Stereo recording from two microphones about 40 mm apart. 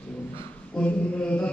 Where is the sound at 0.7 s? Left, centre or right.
Left.